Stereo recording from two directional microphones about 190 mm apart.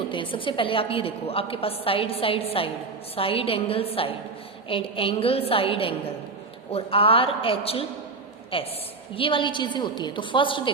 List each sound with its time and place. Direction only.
0.1 s a woman's voice: 25° left (ahead or behind)